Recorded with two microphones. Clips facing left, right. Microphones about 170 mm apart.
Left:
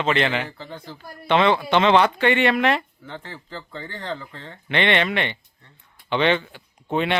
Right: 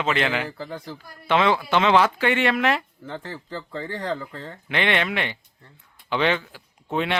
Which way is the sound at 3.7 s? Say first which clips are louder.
Right 4 dB; 30° right (ahead or behind).